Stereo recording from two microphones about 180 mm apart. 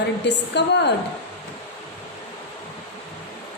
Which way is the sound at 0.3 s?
70° left (ahead or behind).